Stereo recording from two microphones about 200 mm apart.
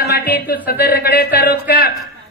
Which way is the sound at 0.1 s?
50° left (ahead or behind).